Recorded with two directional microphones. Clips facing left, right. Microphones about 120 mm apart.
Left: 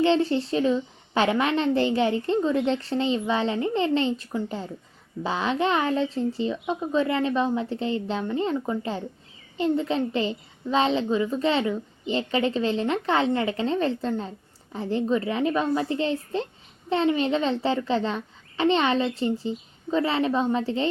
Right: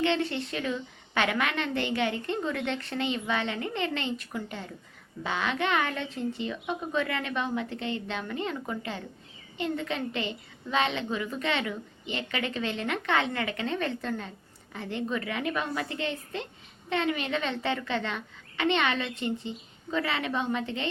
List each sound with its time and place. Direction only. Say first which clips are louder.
0.0 s a woman's voice: left 6 dB; 30° left (ahead or behind)